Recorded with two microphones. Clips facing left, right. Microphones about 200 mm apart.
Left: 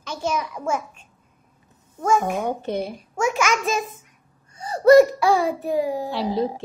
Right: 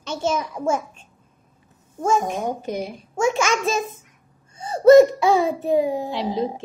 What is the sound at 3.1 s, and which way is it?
A child's voice, 25° right (ahead or behind).